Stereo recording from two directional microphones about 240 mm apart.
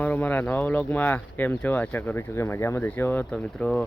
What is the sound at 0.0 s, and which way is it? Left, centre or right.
Speech, centre.